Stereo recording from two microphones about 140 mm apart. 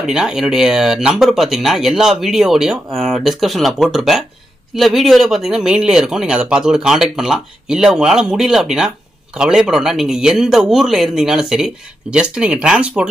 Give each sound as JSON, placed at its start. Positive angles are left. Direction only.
{"t": 0.0, "sound": "speech", "side_deg": -5}